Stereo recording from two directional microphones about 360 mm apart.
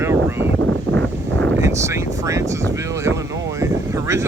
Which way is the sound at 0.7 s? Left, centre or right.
Right.